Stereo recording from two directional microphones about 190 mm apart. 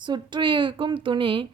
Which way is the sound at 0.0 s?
25° right (ahead or behind).